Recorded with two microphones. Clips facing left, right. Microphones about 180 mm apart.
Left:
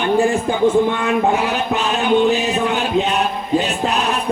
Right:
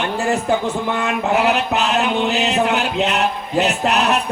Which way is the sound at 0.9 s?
75° right (ahead or behind).